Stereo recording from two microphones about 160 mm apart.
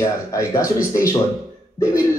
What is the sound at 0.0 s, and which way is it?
Speech, 20° left (ahead or behind).